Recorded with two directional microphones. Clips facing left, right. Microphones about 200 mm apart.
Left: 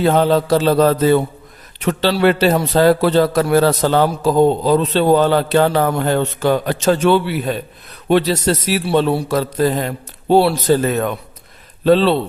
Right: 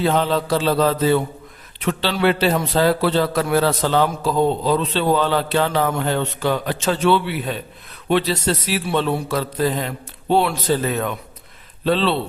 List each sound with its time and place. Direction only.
0.0 s a man's voice: 45° left (ahead or behind)